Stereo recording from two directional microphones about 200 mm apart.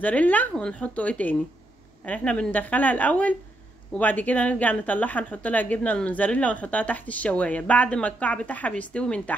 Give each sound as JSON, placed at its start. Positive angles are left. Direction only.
{"t": 0.0, "sound": "a woman's voice", "side_deg": 10}